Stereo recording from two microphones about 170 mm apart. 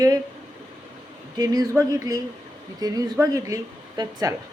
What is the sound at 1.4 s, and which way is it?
Speech, 20° right (ahead or behind).